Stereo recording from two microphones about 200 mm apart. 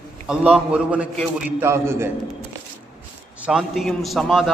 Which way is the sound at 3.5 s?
Centre (ahead or behind).